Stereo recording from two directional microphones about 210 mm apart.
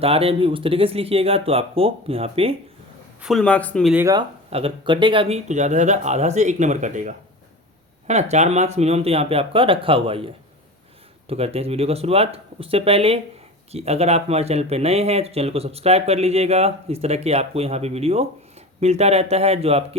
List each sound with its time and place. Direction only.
0.0 s speech: 30° right (ahead or behind)
3.2 s speech: centre (ahead or behind)
3.9 s speech: 15° right (ahead or behind)
4.5 s speech: 25° right (ahead or behind)
11.3 s speech: 30° right (ahead or behind)